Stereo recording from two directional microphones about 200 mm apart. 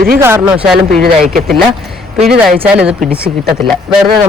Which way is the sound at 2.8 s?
5° right (ahead or behind).